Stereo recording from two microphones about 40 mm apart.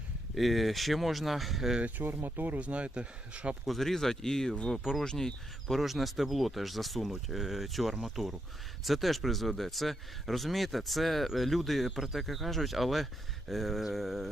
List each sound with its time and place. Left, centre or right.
0.3 s speech: centre
1.8 s speech: right
2.6 s speech: right
3.7 s speech: centre
5.8 s speech: centre